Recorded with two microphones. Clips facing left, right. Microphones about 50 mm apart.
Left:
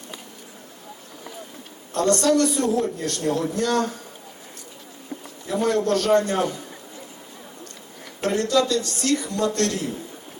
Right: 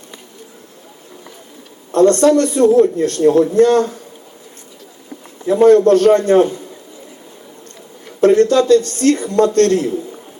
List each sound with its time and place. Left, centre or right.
1.9 s speech: right
5.5 s speech: right
8.2 s speech: right